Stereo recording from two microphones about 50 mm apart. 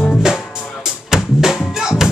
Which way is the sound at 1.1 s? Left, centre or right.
Centre.